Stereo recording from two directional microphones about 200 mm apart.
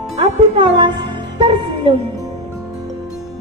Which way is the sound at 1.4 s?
25° right (ahead or behind).